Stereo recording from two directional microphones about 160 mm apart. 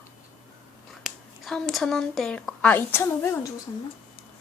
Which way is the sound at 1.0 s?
Centre (ahead or behind).